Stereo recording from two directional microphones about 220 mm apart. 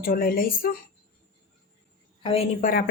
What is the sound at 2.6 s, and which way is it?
Speech, 40° left (ahead or behind).